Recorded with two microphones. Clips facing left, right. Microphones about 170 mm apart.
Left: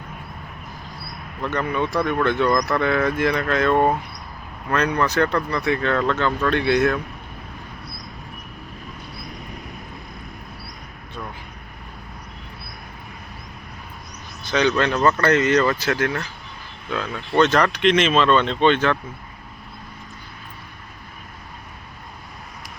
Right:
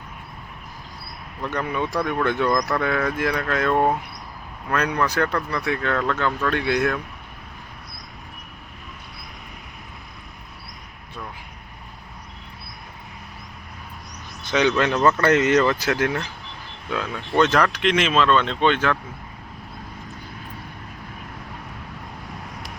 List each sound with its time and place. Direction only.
1.4 s speech: 10° right (ahead or behind)
14.5 s speech: 15° right (ahead or behind)